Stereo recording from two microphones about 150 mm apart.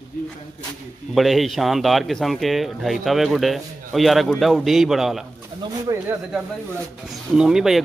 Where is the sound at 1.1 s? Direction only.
Centre (ahead or behind).